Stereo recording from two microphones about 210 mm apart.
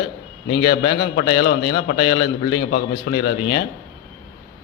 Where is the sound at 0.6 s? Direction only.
55° left (ahead or behind).